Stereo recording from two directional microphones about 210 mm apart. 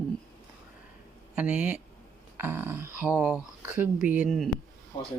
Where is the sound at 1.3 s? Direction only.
5° right (ahead or behind).